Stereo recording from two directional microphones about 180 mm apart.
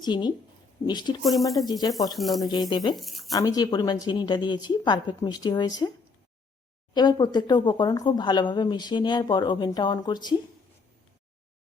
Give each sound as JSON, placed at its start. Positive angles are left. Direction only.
{"t": 0.0, "sound": "speech", "side_deg": 25}
{"t": 1.2, "sound": "speech", "side_deg": 0}
{"t": 1.5, "sound": "speech", "side_deg": 20}
{"t": 2.1, "sound": "speech", "side_deg": 0}
{"t": 2.5, "sound": "speech", "side_deg": 25}
{"t": 2.9, "sound": "speech", "side_deg": 0}
{"t": 3.3, "sound": "speech", "side_deg": 20}
{"t": 6.9, "sound": "speech", "side_deg": 25}